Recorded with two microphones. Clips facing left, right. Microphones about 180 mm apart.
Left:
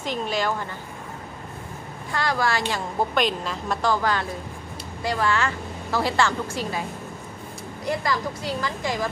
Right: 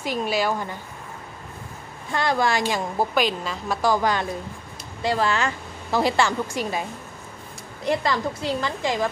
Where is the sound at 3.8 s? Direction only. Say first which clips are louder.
Right 2 dB; 15° right (ahead or behind).